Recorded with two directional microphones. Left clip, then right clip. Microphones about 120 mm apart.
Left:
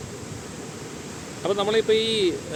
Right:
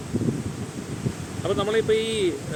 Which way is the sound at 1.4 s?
30° left (ahead or behind).